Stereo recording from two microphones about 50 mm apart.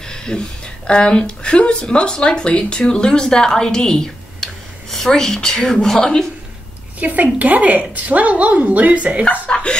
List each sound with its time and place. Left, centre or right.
0.0 s speech: centre
7.0 s a woman's voice: right
9.5 s speech: centre